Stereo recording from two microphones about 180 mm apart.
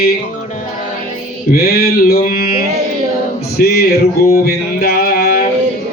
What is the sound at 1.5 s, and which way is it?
Mantra, 60° left (ahead or behind).